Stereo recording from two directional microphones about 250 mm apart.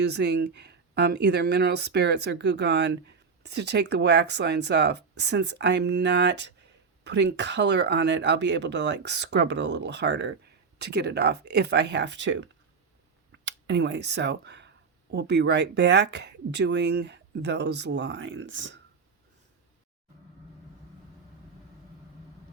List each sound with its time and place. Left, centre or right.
0.0 s speech: right